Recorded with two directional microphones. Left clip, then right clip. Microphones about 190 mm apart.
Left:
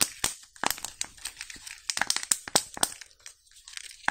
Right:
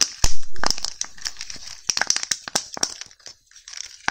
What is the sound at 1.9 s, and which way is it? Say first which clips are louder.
Crack: right 6 dB; 20° right (ahead or behind).